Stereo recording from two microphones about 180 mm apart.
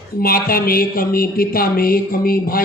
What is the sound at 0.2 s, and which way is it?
A man's voice, 55° left (ahead or behind).